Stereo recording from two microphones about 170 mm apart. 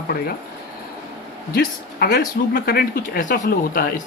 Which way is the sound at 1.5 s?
65° left (ahead or behind).